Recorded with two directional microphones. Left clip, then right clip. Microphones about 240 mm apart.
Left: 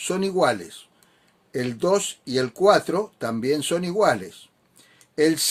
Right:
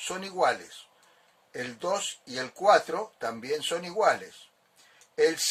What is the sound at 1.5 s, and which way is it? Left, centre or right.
Speech, left.